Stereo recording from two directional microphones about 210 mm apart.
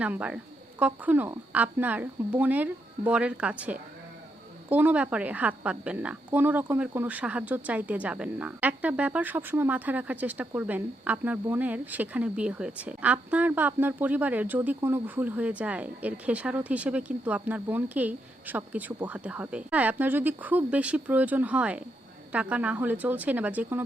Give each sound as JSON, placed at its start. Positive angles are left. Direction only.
{"t": 0.0, "sound": "a woman's voice", "side_deg": -5}